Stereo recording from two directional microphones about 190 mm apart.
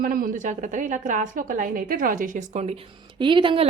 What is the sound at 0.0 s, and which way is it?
A woman's voice, 50° right (ahead or behind).